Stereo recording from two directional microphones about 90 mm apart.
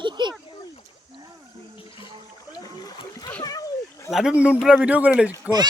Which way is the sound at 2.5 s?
45° left (ahead or behind).